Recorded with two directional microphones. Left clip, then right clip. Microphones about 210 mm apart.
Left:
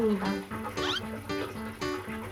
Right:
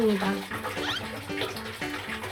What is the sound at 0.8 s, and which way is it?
Music, centre (ahead or behind).